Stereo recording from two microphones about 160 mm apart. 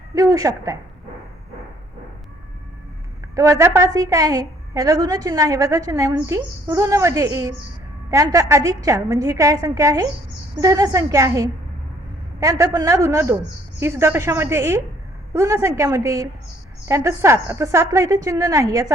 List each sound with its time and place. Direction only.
0.1 s a woman's voice: 20° right (ahead or behind)
3.3 s a woman's voice: 20° right (ahead or behind)